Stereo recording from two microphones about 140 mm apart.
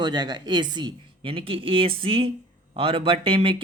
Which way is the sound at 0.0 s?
30° right (ahead or behind).